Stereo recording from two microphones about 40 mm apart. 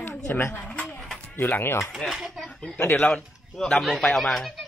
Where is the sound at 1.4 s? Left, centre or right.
Left.